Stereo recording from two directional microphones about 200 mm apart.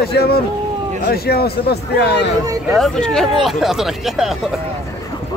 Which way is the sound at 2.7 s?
Centre (ahead or behind).